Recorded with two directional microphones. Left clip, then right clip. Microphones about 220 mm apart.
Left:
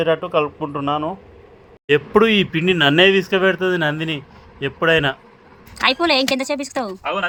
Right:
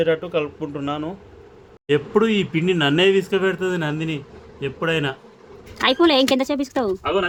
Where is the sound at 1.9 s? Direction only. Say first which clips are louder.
Left 4 dB; 20° left (ahead or behind).